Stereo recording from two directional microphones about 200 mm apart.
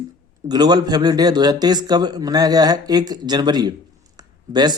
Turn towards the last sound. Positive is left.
turn(degrees=-20)  # may be behind; listen again after turning